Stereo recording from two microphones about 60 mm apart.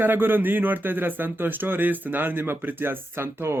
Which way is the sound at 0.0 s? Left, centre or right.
Right.